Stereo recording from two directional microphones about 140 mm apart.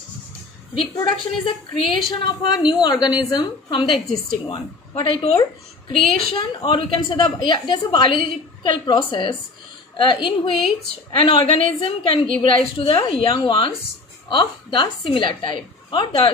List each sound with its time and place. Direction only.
0.9 s a woman's voice: 35° left (ahead or behind)